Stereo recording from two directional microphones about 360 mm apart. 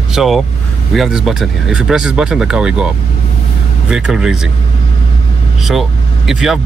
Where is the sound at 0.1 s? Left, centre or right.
Centre.